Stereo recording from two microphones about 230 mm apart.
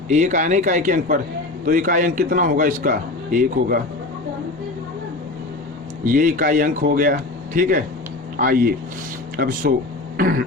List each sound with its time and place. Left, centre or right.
0.1 s a man's voice: right
6.1 s a man's voice: right